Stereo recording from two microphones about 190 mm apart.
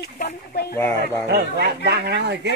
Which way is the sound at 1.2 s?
60° right (ahead or behind).